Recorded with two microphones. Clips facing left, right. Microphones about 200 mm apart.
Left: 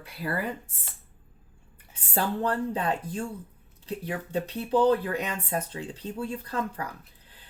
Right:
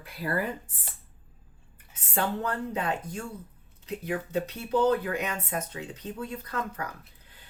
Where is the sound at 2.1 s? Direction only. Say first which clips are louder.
Left 2 dB; 35° left (ahead or behind).